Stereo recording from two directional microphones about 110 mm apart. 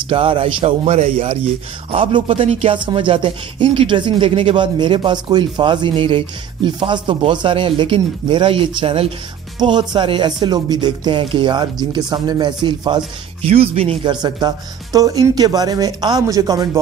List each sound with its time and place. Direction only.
0.1 s speech: 50° right (ahead or behind)
1.9 s speech: 55° right (ahead or behind)
9.6 s speech: 40° right (ahead or behind)
13.4 s speech: 65° right (ahead or behind)
14.0 s speech: 40° right (ahead or behind)